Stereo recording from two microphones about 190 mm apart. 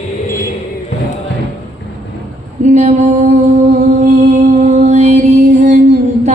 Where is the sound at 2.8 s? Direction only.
35° right (ahead or behind).